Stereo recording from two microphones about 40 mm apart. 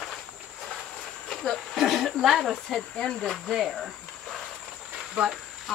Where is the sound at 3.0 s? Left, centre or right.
Centre.